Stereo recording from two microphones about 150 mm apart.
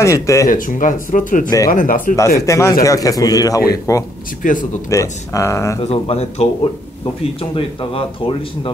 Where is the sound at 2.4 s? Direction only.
20° left (ahead or behind).